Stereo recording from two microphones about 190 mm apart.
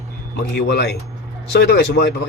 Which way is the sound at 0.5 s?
60° left (ahead or behind).